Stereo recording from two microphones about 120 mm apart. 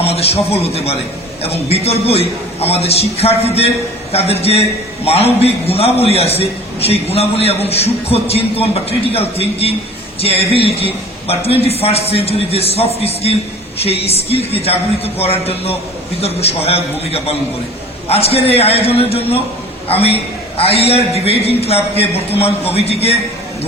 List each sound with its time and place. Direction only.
0.0 s a man's voice: 55° left (ahead or behind)